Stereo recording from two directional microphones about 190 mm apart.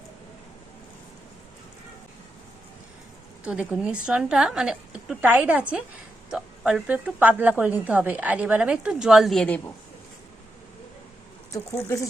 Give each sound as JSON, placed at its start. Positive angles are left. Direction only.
{"t": 3.4, "sound": "a woman's voice", "side_deg": -5}